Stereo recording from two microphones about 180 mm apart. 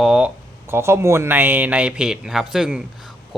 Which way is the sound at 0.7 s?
15° right (ahead or behind).